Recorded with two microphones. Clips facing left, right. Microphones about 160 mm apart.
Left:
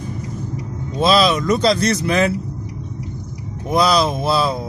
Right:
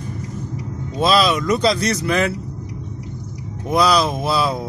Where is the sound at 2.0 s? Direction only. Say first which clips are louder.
Left 1 dB; 35° left (ahead or behind).